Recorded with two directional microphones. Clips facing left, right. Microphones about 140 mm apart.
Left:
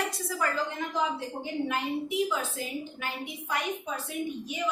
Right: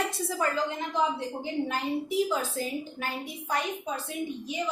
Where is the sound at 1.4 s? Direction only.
35° right (ahead or behind).